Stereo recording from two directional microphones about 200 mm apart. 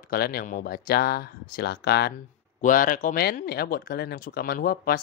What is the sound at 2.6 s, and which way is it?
Speech, 40° left (ahead or behind).